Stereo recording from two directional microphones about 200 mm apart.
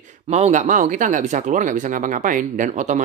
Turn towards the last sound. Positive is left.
turn(degrees=-40)  # may be behind; listen again after turning